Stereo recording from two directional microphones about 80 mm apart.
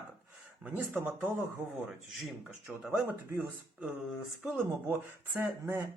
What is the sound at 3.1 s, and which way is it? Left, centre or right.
Speech, right.